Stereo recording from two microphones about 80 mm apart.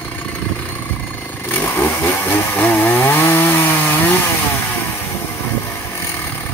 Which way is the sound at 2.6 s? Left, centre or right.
Left.